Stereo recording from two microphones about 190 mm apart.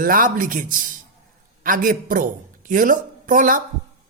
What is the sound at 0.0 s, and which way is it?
Speech, 50° right (ahead or behind).